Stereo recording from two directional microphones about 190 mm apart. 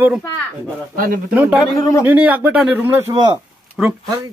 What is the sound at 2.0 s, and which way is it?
A man's voice, 10° right (ahead or behind).